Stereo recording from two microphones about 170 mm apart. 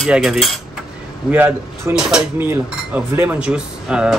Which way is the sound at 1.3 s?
10° right (ahead or behind).